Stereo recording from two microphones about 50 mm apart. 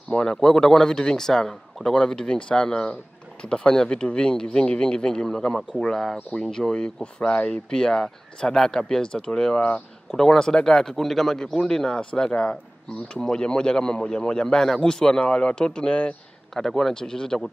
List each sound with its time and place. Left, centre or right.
0.1 s speech: centre
16.5 s speech: centre